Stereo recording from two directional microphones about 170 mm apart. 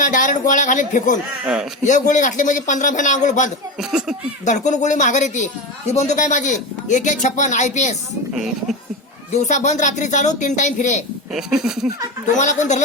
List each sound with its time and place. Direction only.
0.0 s speech: 50° left (ahead or behind)
3.8 s a sound: 5° right (ahead or behind)
4.4 s speech: 45° left (ahead or behind)
9.3 s speech: 45° left (ahead or behind)
11.3 s a sound: centre (ahead or behind)
12.4 s speech: 45° left (ahead or behind)